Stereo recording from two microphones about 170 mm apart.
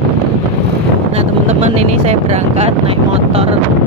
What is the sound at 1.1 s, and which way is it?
Speech, 40° right (ahead or behind).